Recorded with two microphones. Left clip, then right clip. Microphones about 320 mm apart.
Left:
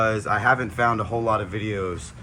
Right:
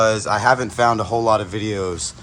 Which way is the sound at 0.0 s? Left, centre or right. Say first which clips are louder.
Right 5 dB; centre.